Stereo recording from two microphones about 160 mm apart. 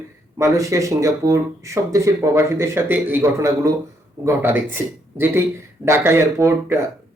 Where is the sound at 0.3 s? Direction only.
20° right (ahead or behind).